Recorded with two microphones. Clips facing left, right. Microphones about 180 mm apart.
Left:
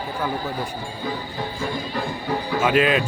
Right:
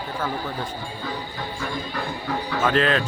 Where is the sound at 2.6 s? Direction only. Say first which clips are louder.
Left 2 dB; 10° left (ahead or behind).